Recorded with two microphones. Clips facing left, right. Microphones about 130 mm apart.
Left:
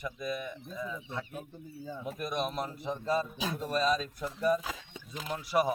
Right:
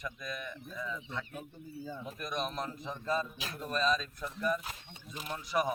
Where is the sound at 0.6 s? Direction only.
25° left (ahead or behind).